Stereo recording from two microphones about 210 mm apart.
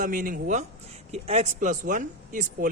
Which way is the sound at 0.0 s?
40° right (ahead or behind).